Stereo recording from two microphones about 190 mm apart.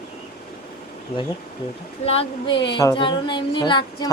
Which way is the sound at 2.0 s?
30° left (ahead or behind).